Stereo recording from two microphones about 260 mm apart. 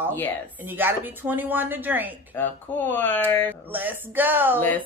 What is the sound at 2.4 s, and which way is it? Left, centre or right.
Speech, centre.